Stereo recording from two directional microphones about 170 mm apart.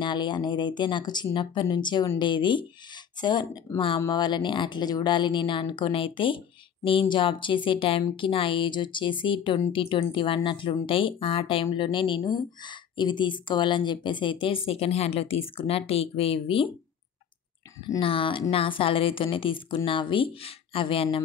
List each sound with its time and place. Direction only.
0.0 s speech: 25° left (ahead or behind)
18.0 s a woman's voice: 30° left (ahead or behind)